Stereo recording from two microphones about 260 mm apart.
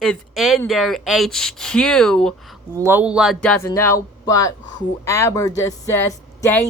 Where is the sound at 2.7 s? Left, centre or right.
Centre.